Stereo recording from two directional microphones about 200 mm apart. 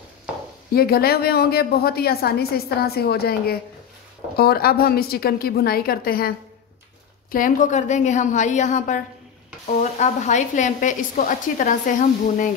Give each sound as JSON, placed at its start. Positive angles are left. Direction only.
{"t": 0.7, "sound": "a woman's voice", "side_deg": 50}